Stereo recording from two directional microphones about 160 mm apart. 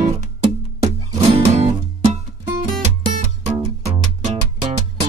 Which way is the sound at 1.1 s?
40° right (ahead or behind).